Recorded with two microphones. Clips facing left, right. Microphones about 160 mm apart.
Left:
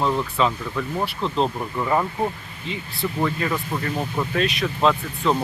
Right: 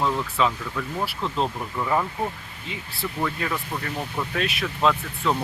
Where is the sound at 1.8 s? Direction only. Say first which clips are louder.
Left 2 dB; 10° left (ahead or behind).